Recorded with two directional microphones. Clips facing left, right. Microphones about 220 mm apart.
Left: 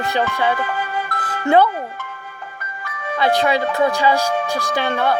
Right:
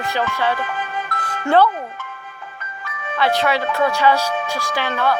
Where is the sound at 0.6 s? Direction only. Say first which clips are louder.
Left 2 dB; 40° left (ahead or behind).